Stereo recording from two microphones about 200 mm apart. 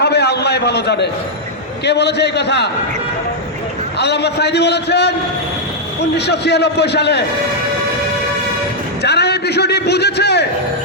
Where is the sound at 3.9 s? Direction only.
55° left (ahead or behind).